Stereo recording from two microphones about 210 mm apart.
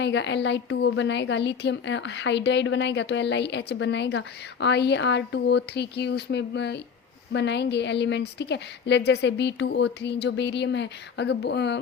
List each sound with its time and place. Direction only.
0.0 s a woman's voice: 60° left (ahead or behind)